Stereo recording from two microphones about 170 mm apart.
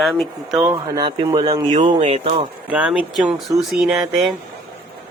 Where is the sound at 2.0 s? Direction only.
40° right (ahead or behind).